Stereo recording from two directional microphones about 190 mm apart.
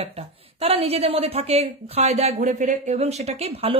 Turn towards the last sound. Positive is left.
turn(degrees=-30)  # may be behind; listen again after turning